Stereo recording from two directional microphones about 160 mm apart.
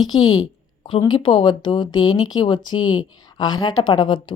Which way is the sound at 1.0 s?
35° left (ahead or behind).